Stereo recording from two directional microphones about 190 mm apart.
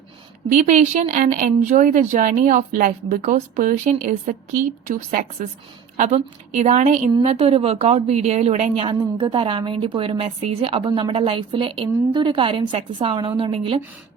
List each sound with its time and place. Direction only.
0.5 s speech: 40° right (ahead or behind)
7.1 s a woman's voice: 25° right (ahead or behind)